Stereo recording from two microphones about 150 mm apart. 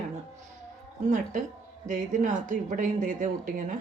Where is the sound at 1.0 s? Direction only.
55° right (ahead or behind).